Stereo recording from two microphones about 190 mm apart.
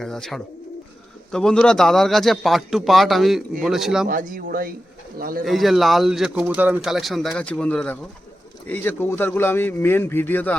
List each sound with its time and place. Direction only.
0.0 s a man's voice: centre (ahead or behind)
4.1 s speech: 45° right (ahead or behind)
5.5 s a man's voice: centre (ahead or behind)